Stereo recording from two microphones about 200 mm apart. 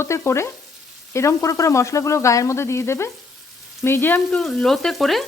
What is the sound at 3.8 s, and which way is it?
Frying, 10° left (ahead or behind).